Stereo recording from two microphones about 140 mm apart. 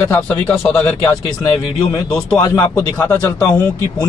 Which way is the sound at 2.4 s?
30° left (ahead or behind).